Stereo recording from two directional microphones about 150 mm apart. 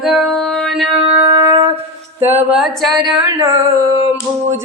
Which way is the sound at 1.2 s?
20° right (ahead or behind).